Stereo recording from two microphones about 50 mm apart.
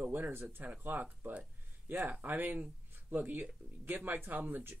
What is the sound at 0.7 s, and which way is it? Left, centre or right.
Speech, right.